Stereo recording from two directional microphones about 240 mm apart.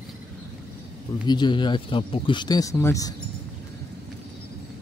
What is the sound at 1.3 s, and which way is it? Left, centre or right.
Speech, centre.